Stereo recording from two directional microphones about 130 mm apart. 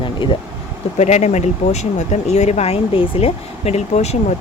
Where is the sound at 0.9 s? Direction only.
60° left (ahead or behind).